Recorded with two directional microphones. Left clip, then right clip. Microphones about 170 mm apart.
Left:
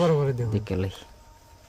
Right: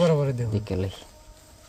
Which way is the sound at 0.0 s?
35° left (ahead or behind).